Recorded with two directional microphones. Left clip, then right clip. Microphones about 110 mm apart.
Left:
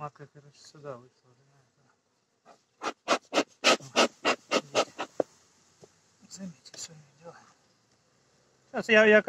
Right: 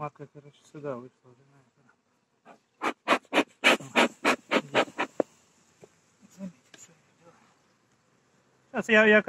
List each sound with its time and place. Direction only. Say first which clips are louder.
0.0 s speech: right 3 dB; 25° right (ahead or behind)
2.4 s a sound: right 4 dB; 30° right (ahead or behind)
8.6 s speech: even; 25° right (ahead or behind)